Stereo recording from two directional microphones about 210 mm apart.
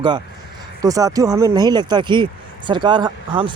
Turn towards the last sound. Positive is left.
turn(degrees=-20)  # may be behind; listen again after turning